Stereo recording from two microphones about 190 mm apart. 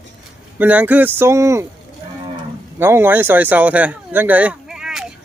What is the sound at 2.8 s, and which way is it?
Speech, 10° right (ahead or behind).